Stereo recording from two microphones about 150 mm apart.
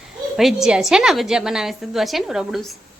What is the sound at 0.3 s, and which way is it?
A woman's voice, centre (ahead or behind).